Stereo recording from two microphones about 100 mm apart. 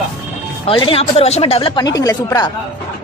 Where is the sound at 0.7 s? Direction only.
60° left (ahead or behind); by 1.7 s 90° left.